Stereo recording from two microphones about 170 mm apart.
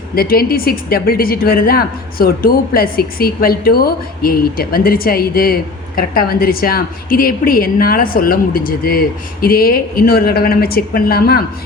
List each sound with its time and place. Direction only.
0.2 s a woman's voice: 60° left (ahead or behind)